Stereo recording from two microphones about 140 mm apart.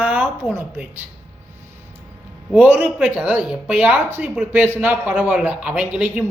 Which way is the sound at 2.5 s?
10° right (ahead or behind).